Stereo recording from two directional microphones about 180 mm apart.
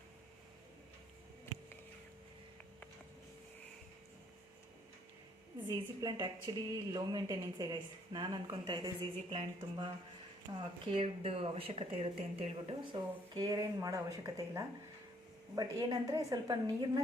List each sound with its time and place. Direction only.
5.6 s a woman's voice: 20° right (ahead or behind)